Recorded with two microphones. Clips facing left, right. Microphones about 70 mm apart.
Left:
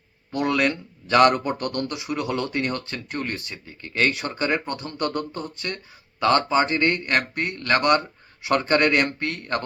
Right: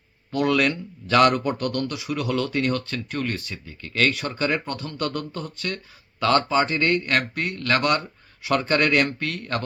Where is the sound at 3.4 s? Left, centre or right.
Centre.